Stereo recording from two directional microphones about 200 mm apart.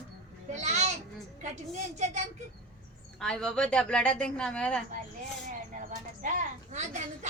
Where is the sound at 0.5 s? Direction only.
35° right (ahead or behind).